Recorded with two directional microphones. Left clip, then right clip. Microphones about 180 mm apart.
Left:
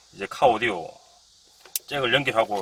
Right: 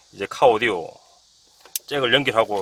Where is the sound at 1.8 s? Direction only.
70° right (ahead or behind).